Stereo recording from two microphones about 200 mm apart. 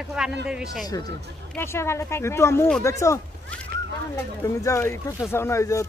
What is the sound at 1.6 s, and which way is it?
Speech, 15° left (ahead or behind).